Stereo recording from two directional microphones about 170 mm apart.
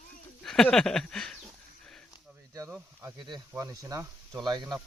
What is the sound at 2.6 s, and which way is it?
Speech, 10° right (ahead or behind).